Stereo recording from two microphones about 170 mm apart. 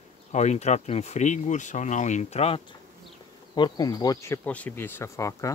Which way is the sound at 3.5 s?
25° left (ahead or behind).